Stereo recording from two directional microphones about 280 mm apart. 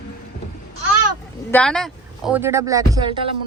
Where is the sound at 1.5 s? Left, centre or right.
Centre.